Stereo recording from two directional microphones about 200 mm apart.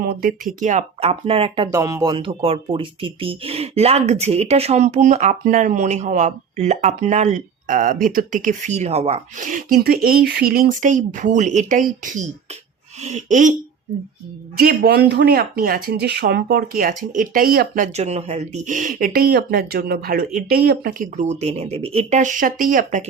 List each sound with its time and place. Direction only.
0.0 s speech: 50° right (ahead or behind)
14.5 s speech: 50° right (ahead or behind)